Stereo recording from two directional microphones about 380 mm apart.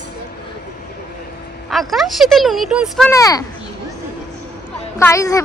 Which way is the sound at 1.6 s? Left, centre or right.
Centre.